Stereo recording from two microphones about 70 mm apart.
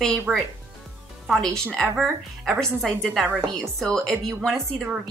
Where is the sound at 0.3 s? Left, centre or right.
Centre.